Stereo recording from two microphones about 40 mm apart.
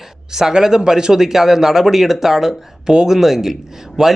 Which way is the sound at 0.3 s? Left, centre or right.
Centre.